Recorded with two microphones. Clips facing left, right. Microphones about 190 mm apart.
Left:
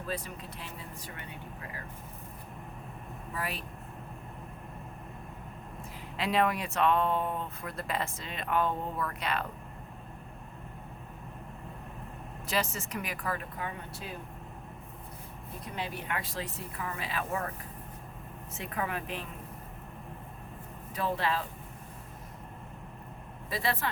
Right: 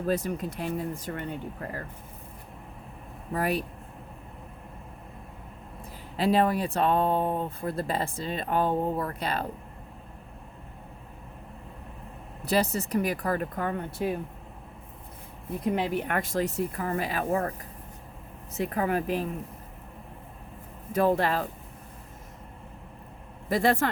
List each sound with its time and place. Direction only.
0.0 s speech: 45° right (ahead or behind)
3.3 s speech: 40° right (ahead or behind)
6.1 s speech: 35° right (ahead or behind)
12.5 s speech: 35° right (ahead or behind); by 14.2 s 55° right (ahead or behind)
15.6 s speech: 60° right (ahead or behind); by 17.5 s 40° right (ahead or behind)
18.5 s speech: 35° right (ahead or behind)
20.9 s speech: 45° right (ahead or behind)
23.5 s speech: 45° right (ahead or behind)